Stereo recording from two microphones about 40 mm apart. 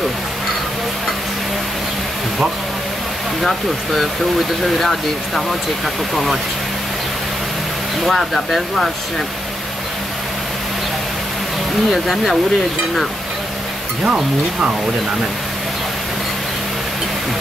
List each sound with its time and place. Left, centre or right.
3.4 s speech: centre
8.1 s speech: centre
11.9 s speech: centre
14.0 s speech: right